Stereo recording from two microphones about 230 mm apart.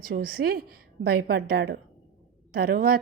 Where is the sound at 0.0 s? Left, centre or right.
Right.